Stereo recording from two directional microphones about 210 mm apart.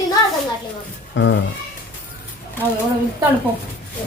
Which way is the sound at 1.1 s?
60° left (ahead or behind).